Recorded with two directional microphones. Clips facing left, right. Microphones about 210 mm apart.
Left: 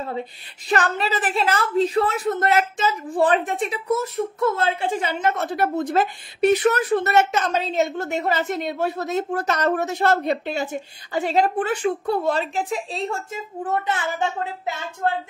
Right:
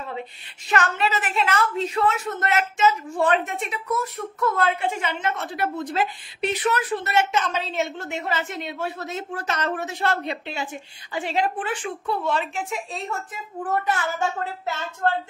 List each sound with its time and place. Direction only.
0.7 s a woman's voice: 35° left (ahead or behind); by 14.9 s 15° left (ahead or behind)